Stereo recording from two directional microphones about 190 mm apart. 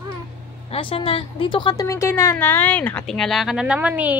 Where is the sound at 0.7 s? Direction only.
30° left (ahead or behind).